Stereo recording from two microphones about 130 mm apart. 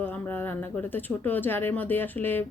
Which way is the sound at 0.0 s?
15° left (ahead or behind).